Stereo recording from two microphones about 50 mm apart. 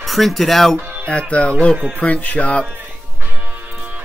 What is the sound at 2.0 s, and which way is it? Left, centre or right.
Music, left.